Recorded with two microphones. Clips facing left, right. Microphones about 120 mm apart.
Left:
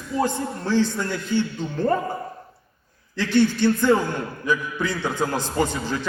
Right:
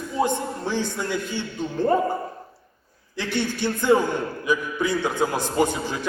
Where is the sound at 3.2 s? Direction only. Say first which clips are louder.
Left 7 dB; 15° right (ahead or behind).